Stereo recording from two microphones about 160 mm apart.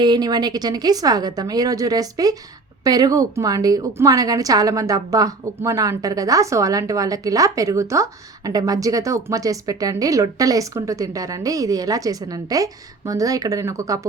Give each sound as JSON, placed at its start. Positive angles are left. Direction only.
{"t": 0.0, "sound": "a woman's voice", "side_deg": -25}